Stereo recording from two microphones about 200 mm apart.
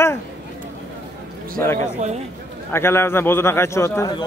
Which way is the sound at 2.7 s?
10° left (ahead or behind).